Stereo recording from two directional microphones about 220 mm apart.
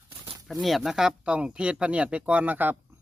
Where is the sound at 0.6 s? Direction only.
Centre (ahead or behind).